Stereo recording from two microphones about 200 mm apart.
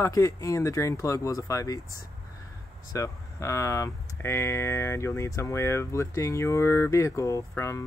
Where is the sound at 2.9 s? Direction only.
15° left (ahead or behind).